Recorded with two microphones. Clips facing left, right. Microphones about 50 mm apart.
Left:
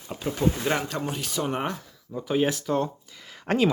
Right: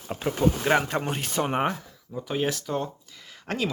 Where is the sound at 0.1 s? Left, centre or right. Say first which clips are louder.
Right 1 dB; right.